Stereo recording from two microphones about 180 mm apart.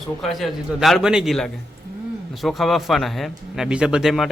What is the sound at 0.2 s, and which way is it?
A man's voice, centre (ahead or behind).